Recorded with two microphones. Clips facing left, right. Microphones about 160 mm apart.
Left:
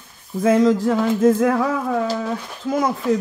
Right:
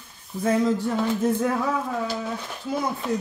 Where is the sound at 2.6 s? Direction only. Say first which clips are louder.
Left 7 dB; 90° left.